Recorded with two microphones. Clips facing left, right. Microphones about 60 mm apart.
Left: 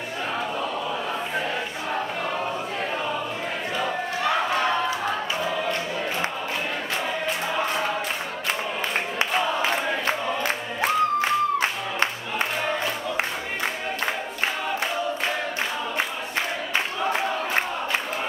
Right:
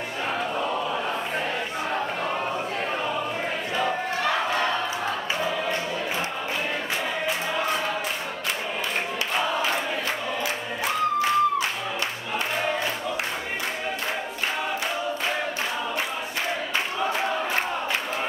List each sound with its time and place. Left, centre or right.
9.6 s crowd: left